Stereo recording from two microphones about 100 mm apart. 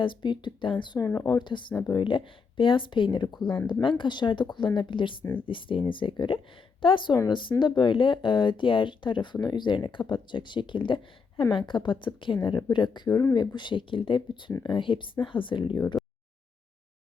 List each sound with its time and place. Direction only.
0.0 s a woman's voice: 50° left (ahead or behind)
0.9 s speech: 30° left (ahead or behind)
1.5 s a woman's voice: 50° left (ahead or behind)
5.2 s speech: 20° left (ahead or behind)
5.5 s a woman's voice: 55° left (ahead or behind)